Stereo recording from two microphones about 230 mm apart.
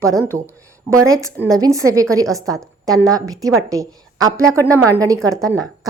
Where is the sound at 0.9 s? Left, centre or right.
Centre.